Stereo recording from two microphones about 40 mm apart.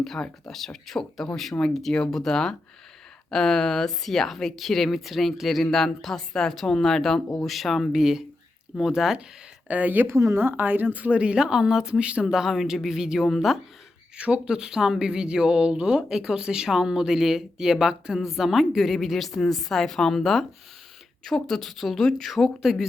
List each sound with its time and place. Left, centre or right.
0.0 s a woman's voice: centre
8.8 s speech: centre
9.6 s speech: right
10.1 s speech: right
10.5 s speech: right
11.3 s speech: centre
12.3 s speech: centre
13.1 s a woman's voice: centre
14.2 s speech: right
14.5 s speech: centre
18.2 s a woman's voice: centre
21.4 s a woman's voice: centre